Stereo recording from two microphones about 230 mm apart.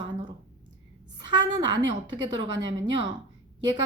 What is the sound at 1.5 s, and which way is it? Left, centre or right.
Speech, centre.